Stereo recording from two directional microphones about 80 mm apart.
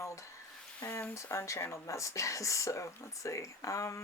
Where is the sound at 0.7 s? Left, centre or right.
Left.